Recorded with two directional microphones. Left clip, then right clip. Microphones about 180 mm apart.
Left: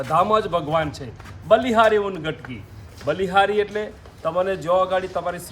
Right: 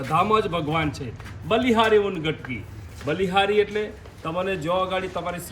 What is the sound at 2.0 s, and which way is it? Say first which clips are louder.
A man's voice: right 1 dB; 20° left (ahead or behind).